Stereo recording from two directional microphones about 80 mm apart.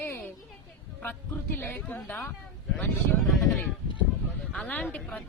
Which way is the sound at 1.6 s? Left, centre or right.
Left.